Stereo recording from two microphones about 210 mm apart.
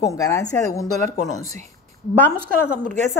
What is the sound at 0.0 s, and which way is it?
Speech, 15° left (ahead or behind).